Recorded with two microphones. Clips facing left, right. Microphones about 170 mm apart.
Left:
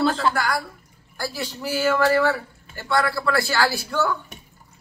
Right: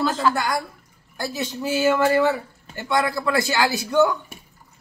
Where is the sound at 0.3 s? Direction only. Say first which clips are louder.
Right 1 dB; 20° right (ahead or behind).